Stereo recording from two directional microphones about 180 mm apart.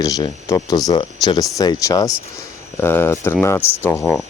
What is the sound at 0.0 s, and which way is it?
Speech, 20° left (ahead or behind).